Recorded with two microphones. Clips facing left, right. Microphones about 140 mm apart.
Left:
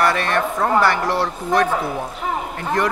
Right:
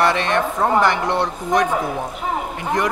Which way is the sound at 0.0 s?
20° right (ahead or behind).